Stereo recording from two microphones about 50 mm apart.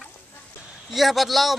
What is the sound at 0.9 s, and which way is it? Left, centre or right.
Speech, centre.